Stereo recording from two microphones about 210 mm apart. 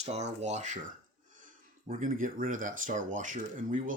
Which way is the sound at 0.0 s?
30° right (ahead or behind).